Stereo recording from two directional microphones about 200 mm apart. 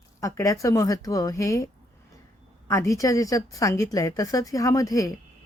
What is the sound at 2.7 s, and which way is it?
A woman's voice, 15° left (ahead or behind).